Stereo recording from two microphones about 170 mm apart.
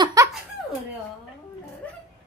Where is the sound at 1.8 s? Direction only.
10° left (ahead or behind).